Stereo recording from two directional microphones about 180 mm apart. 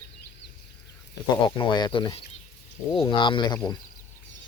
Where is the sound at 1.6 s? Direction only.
25° left (ahead or behind).